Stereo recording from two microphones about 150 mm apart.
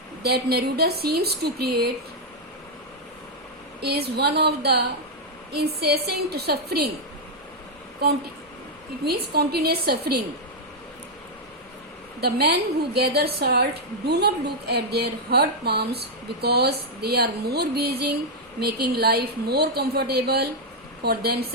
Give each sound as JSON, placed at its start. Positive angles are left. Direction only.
{"t": 0.2, "sound": "a woman's voice", "side_deg": -90}
{"t": 3.8, "sound": "a woman's voice", "side_deg": -90}
{"t": 8.0, "sound": "a woman's voice", "side_deg": -90}
{"t": 12.2, "sound": "a woman's voice", "side_deg": -90}